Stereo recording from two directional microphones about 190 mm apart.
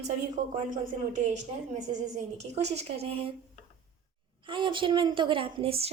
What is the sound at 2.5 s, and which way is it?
Speech, 35° right (ahead or behind).